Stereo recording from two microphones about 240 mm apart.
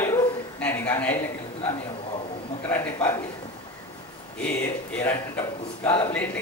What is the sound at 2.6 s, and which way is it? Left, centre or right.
Speech, centre.